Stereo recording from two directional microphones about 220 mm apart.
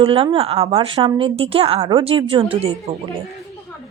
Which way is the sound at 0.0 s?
25° right (ahead or behind).